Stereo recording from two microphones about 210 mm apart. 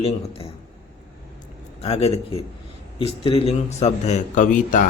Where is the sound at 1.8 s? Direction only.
30° left (ahead or behind).